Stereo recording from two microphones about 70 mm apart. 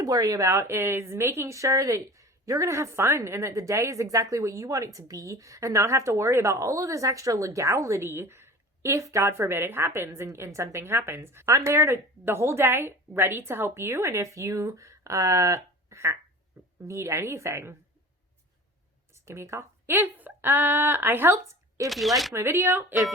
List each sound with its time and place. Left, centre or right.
0.0 s a woman's voice: right
9.0 s a woman's voice: right
19.1 s speech: right
21.8 s speech: centre
22.4 s a woman's voice: right